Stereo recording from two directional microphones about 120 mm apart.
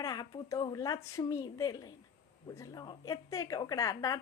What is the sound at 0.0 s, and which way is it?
A woman's voice, 35° left (ahead or behind).